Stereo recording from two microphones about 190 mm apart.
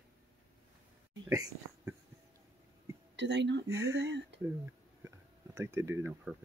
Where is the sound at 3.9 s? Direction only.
70° right (ahead or behind).